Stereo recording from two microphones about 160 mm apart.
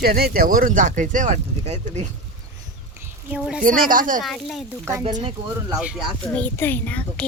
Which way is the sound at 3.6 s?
60° right (ahead or behind).